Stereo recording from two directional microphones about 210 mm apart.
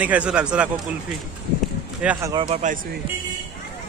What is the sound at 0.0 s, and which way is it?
Speech, 5° right (ahead or behind).